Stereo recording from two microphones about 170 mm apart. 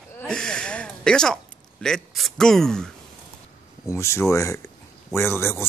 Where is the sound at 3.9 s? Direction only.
15° left (ahead or behind).